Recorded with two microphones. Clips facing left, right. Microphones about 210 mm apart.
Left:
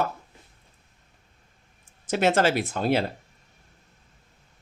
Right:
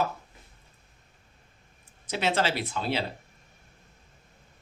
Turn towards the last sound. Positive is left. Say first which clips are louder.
# left 6 dB
turn(degrees=50)  # may be behind; listen again after turning